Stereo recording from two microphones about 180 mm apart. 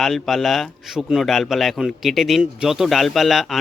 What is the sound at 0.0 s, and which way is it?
Speech, centre (ahead or behind).